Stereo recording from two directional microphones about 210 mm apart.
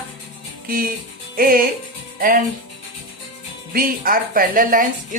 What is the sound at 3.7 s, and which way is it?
Speech, 45° right (ahead or behind).